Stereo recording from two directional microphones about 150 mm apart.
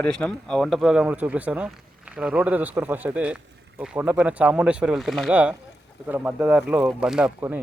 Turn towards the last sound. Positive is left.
turn(degrees=-5)  # may be behind; listen again after turning